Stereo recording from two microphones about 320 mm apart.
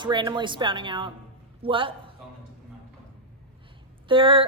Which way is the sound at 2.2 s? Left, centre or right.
Centre.